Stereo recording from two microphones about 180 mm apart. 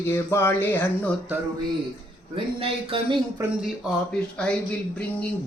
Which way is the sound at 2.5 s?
30° right (ahead or behind).